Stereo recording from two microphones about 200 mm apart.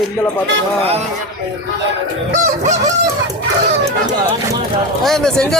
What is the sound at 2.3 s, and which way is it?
Fowl, 40° right (ahead or behind).